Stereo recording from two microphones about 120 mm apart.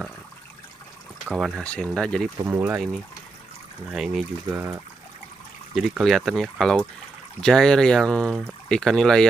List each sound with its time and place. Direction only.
1.3 s speech: centre (ahead or behind)
1.6 s speech: 10° left (ahead or behind)
2.4 s speech: 25° right (ahead or behind)
3.9 s speech: 5° right (ahead or behind)
5.8 s speech: centre (ahead or behind)